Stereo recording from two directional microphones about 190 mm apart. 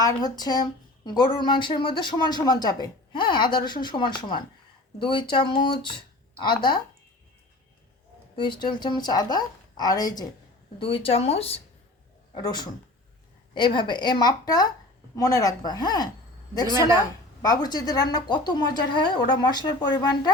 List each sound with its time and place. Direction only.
0.0 s speech: 20° left (ahead or behind)
8.4 s speech: 25° left (ahead or behind)
17.4 s speech: 20° left (ahead or behind)